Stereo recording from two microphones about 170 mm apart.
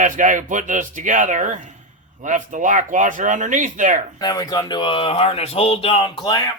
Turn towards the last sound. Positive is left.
turn(degrees=25)  # may be behind; listen again after turning